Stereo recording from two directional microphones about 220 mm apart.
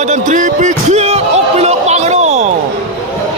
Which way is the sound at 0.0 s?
35° right (ahead or behind).